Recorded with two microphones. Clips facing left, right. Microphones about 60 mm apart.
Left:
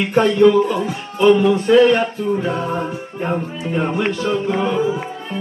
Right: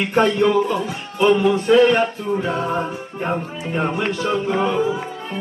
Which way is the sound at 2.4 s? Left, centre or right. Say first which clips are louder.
Left 1 dB; centre.